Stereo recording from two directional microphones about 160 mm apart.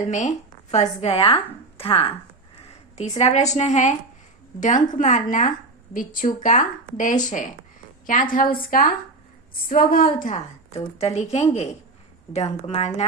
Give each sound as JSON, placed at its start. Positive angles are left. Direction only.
{"t": 0.1, "sound": "a woman's voice", "side_deg": 45}